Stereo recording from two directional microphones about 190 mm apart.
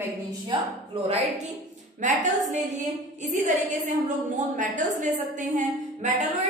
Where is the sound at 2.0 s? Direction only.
40° right (ahead or behind).